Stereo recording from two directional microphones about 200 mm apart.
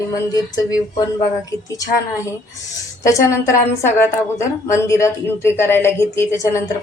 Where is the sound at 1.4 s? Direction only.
15° left (ahead or behind).